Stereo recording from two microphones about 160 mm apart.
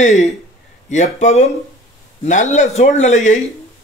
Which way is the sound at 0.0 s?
45° left (ahead or behind).